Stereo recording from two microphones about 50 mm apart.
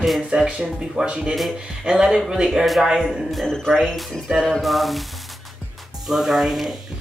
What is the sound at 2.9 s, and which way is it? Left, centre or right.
Speech, centre.